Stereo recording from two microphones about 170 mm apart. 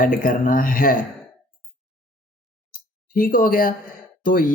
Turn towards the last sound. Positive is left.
turn(degrees=55)  # may be behind; listen again after turning